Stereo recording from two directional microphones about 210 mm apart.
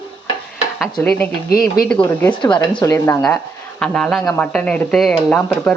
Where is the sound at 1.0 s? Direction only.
10° left (ahead or behind).